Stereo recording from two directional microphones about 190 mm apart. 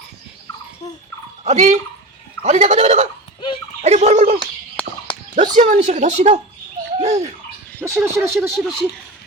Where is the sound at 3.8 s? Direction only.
35° right (ahead or behind).